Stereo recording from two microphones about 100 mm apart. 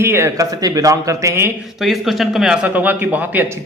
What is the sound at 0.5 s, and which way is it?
Speech, 40° right (ahead or behind).